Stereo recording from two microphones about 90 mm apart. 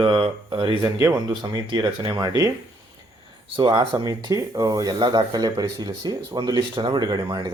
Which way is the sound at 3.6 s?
60° right (ahead or behind).